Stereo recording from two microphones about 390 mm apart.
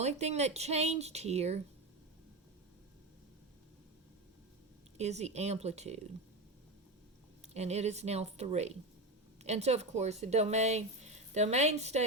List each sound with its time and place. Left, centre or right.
0.0 s speech: centre
4.9 s speech: centre
7.5 s speech: centre